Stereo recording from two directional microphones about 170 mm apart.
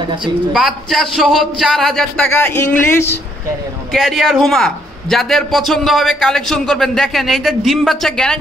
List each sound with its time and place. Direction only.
0.2 s a man's voice: centre (ahead or behind)
2.3 s speech: 15° left (ahead or behind)
3.9 s a man's voice: centre (ahead or behind)